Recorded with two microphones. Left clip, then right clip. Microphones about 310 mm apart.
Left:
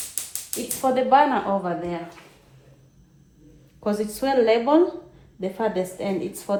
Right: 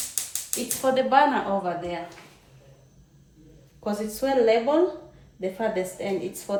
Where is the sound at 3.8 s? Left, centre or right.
Left.